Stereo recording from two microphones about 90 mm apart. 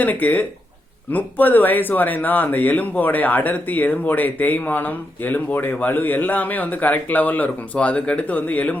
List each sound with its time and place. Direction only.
0.0 s speech: 20° left (ahead or behind)